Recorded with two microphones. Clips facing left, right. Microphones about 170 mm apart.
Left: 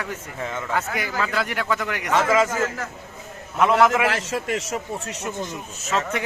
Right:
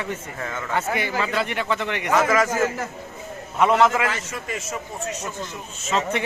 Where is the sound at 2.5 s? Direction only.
25° right (ahead or behind).